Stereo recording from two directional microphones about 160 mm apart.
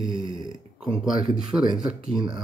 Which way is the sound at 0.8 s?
5° right (ahead or behind).